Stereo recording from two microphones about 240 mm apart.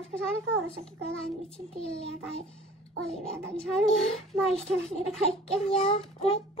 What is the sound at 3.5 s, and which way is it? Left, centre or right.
A child's voice, centre.